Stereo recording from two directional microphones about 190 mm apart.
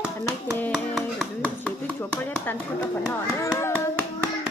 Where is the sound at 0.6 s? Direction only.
5° left (ahead or behind).